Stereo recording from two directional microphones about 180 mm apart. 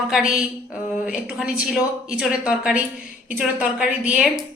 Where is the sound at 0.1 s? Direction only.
5° right (ahead or behind).